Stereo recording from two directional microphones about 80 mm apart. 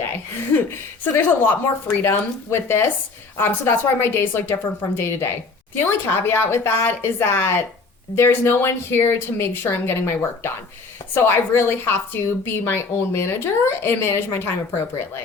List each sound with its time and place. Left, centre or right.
1.1 s a woman's voice: left